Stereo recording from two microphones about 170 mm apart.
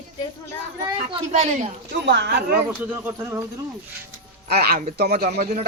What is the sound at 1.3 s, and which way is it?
Speech, 40° right (ahead or behind).